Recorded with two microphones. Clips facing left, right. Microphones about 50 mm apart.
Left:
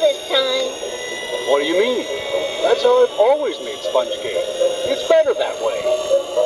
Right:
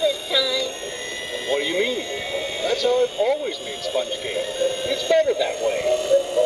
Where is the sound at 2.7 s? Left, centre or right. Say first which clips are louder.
Left 7 dB; left.